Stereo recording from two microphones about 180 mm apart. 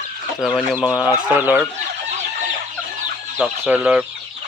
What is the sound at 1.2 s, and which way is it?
Speech, 5° right (ahead or behind).